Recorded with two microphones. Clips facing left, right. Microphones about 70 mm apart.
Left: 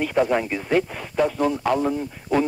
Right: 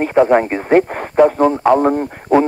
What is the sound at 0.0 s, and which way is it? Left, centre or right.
Speech, right.